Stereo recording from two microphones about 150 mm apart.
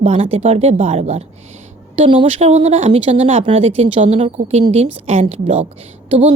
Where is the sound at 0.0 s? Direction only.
40° right (ahead or behind).